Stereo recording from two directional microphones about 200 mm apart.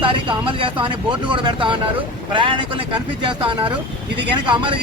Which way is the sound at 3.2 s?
25° right (ahead or behind).